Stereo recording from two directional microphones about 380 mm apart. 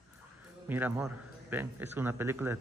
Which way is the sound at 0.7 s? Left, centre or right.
Centre.